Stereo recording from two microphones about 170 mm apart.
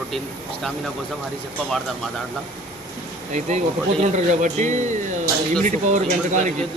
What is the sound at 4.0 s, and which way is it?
Speech, 45° right (ahead or behind).